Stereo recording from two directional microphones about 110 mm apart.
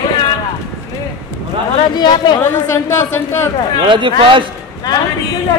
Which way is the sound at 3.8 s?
50° right (ahead or behind).